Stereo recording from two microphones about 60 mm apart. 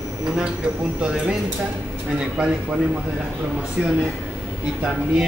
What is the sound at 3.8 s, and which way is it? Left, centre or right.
Speech, centre.